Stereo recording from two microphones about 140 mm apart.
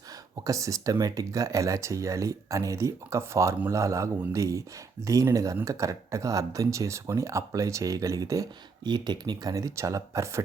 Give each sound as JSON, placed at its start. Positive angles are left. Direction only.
{"t": 0.4, "sound": "speech", "side_deg": -25}